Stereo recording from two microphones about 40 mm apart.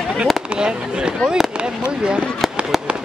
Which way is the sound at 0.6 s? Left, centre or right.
Right.